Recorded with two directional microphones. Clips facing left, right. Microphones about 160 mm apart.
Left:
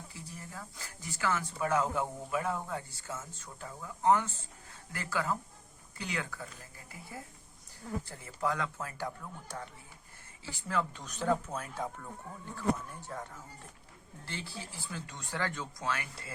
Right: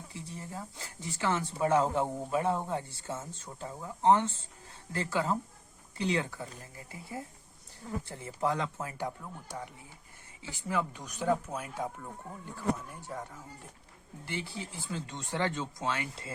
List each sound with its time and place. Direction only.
0.1 s speech: 25° right (ahead or behind)
13.1 s speech: 10° right (ahead or behind)
14.3 s speech: 15° right (ahead or behind)